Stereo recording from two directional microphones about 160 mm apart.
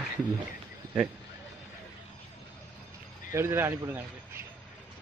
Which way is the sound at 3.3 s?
15° right (ahead or behind).